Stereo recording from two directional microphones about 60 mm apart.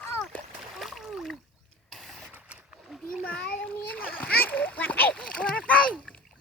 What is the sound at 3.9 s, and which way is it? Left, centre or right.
Splash, left.